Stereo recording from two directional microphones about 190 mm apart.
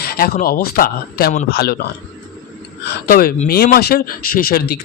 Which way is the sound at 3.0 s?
50° left (ahead or behind).